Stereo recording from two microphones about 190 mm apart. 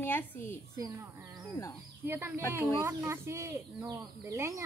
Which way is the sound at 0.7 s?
15° right (ahead or behind).